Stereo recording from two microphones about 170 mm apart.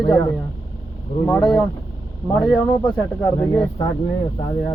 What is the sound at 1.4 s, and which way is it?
Speech, 25° left (ahead or behind).